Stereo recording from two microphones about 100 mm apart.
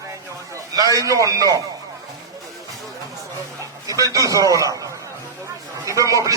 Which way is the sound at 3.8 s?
35° right (ahead or behind).